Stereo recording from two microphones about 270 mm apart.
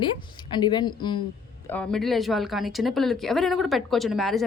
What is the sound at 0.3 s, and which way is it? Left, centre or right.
Speech, centre.